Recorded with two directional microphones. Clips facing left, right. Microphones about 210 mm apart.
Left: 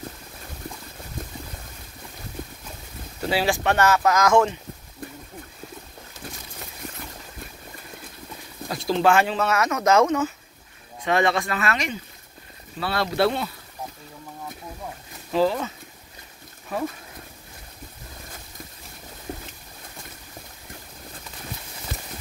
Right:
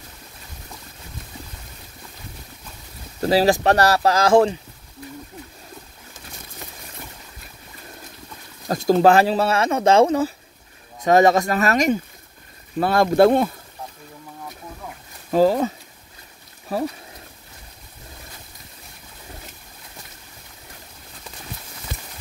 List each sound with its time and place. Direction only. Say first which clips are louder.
3.2 s speech: right 7 dB; 40° right (ahead or behind)
8.6 s speech: right 6 dB; 45° right (ahead or behind)
15.3 s speech: right 5 dB; 40° right (ahead or behind)